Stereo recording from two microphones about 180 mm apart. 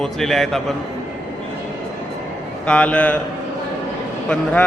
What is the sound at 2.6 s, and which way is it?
Speech, 5° left (ahead or behind).